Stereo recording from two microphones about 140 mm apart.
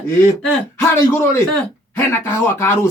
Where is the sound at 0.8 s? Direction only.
20° left (ahead or behind).